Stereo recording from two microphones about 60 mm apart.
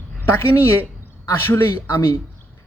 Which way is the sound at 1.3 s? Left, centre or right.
Left.